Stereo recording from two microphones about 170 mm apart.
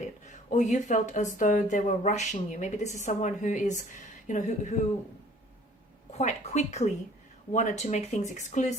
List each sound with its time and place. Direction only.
0.0 s a woman's voice: 45° left (ahead or behind)
6.1 s a woman's voice: 40° left (ahead or behind)